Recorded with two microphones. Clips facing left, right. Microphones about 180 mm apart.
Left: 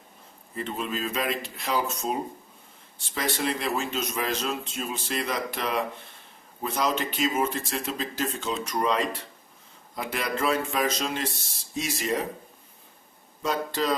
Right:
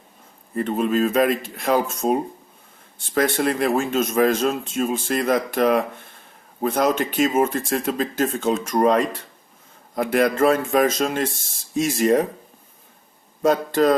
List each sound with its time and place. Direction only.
0.5 s speech: 50° right (ahead or behind)
3.2 s speech: 50° right (ahead or behind)
13.4 s speech: 50° right (ahead or behind)